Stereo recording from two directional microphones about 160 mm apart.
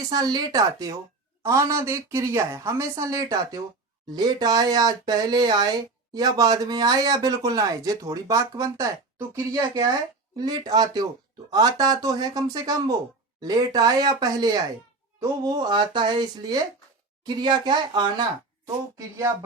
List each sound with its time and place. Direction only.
0.0 s speech: 25° right (ahead or behind)